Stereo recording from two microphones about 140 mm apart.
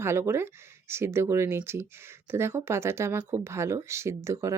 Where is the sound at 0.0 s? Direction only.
15° right (ahead or behind).